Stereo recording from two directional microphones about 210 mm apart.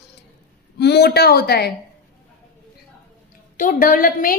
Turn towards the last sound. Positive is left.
turn(degrees=40)  # may be behind; listen again after turning